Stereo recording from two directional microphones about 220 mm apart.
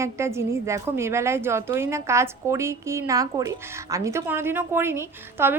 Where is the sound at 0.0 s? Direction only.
10° right (ahead or behind).